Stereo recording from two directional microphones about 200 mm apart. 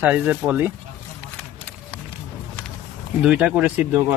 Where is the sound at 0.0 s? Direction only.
5° right (ahead or behind).